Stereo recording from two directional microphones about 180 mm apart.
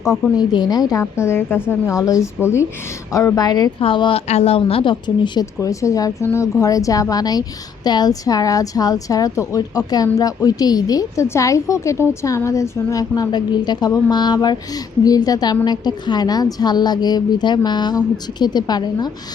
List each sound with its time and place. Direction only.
0.0 s speech: centre (ahead or behind)
0.3 s a woman's voice: 25° left (ahead or behind)